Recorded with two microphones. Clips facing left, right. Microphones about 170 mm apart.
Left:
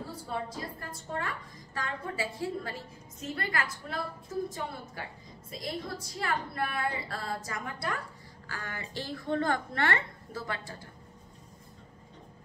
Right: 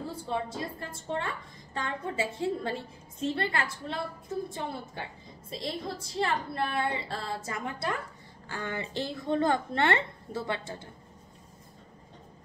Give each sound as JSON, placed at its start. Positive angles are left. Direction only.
{"t": 0.3, "sound": "a woman's voice", "side_deg": -25}